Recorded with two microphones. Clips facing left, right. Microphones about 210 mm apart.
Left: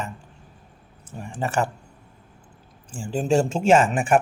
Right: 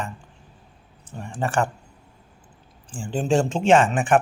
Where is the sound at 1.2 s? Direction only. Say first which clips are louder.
Right 1 dB; 5° left (ahead or behind).